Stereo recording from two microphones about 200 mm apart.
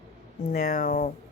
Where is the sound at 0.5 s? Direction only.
45° left (ahead or behind).